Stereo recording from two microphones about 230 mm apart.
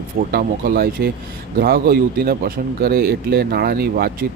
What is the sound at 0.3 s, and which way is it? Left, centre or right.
Speech, right.